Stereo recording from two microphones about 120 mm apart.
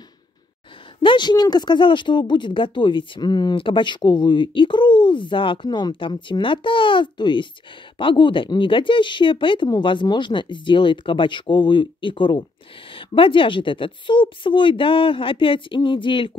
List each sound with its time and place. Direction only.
1.0 s speech: 40° left (ahead or behind)